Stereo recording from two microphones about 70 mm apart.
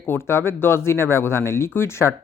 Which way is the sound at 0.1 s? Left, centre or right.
Left.